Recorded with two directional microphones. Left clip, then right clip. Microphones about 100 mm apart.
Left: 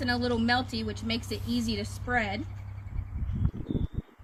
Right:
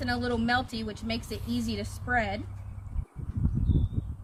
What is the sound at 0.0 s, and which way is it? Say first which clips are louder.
A woman's voice: left 1 dB; 50° right (ahead or behind).